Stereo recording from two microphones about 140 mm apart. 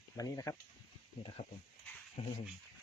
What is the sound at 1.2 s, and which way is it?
Speech, 40° left (ahead or behind).